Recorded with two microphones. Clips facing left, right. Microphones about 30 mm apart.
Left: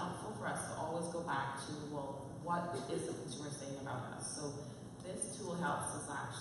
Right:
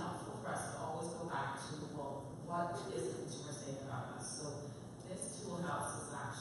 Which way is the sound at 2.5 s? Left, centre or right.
Left.